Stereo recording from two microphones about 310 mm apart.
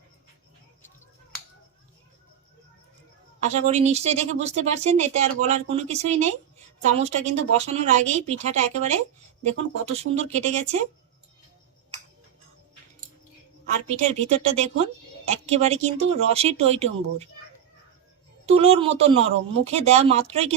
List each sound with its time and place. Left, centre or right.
3.4 s speech: right
13.9 s speech: right
18.4 s speech: centre